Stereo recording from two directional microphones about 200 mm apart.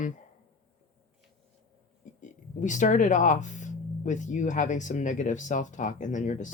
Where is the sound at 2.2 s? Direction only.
40° left (ahead or behind).